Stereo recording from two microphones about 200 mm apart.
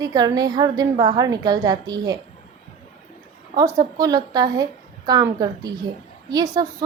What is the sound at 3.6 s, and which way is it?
A woman's voice, 15° right (ahead or behind).